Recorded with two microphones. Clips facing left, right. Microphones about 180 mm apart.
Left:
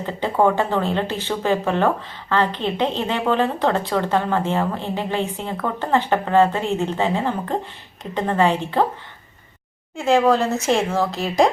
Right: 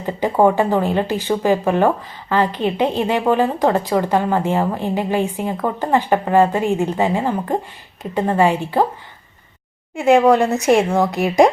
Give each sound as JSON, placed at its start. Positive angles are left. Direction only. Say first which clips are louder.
{"t": 0.0, "sound": "a woman's voice", "louder": "right 3 dB", "side_deg": -15}
{"t": 10.0, "sound": "a woman's voice", "louder": "right 4 dB", "side_deg": -15}